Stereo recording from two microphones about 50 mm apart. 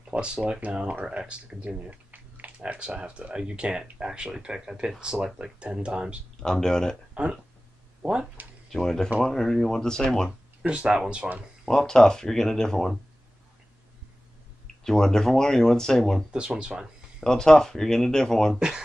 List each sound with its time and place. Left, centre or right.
0.1 s speech: right
2.8 s speech: right
6.4 s speech: centre
8.0 s speech: centre
8.7 s speech: centre
10.7 s speech: centre
11.6 s speech: centre
14.8 s speech: centre
16.3 s speech: centre
17.2 s speech: centre